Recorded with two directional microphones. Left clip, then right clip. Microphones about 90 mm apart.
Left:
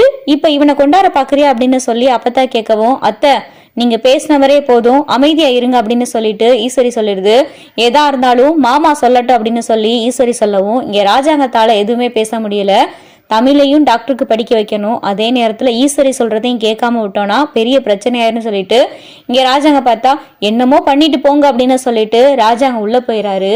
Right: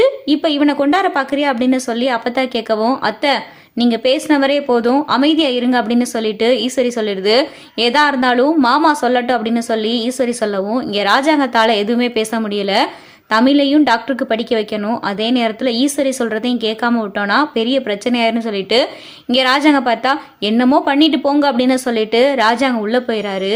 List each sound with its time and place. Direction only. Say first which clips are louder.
0.0 s a woman's voice: left 5 dB; 20° left (ahead or behind)
10.7 s a woman's voice: left 5 dB; 10° left (ahead or behind); by 16.9 s 25° left (ahead or behind)
16.9 s a woman's voice: left 4 dB; 10° left (ahead or behind)